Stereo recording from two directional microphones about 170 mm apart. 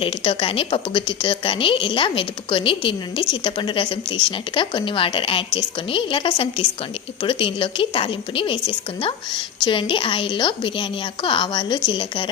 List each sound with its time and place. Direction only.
0.0 s a woman's voice: 30° left (ahead or behind)